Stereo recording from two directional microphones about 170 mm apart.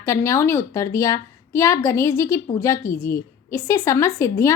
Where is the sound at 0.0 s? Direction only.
15° left (ahead or behind).